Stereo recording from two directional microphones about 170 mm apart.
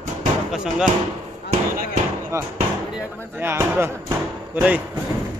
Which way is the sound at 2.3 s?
15° right (ahead or behind).